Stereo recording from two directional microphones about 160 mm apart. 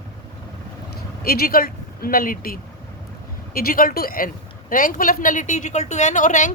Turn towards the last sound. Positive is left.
turn(degrees=50)  # may be behind; listen again after turning